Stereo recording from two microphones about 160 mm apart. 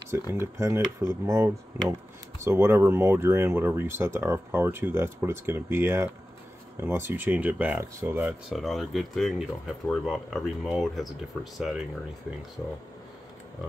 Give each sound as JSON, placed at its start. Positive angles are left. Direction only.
{"t": 0.1, "sound": "speech", "side_deg": -15}
{"t": 8.3, "sound": "speech", "side_deg": 0}